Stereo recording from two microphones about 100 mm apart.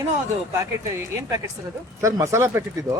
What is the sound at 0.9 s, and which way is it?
Speech, 30° right (ahead or behind).